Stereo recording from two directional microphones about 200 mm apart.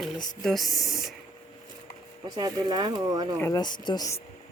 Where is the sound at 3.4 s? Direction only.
15° left (ahead or behind).